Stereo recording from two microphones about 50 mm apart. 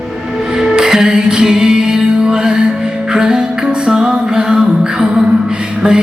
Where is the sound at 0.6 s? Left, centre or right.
Centre.